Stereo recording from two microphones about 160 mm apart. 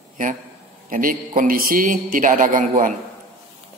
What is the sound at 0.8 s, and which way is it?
Speech, 60° right (ahead or behind).